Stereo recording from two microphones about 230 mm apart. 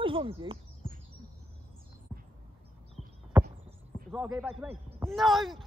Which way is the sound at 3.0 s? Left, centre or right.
Centre.